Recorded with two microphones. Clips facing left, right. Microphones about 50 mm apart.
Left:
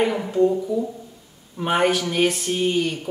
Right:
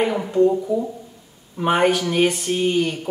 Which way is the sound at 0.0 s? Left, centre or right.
Centre.